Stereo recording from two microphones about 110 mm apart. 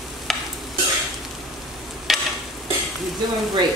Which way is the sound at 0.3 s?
Centre (ahead or behind).